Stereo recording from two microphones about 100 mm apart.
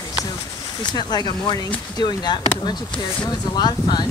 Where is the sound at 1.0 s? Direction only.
45° left (ahead or behind).